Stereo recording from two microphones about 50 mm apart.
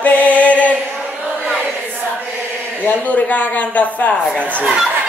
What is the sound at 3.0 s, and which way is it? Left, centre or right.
Speech, left.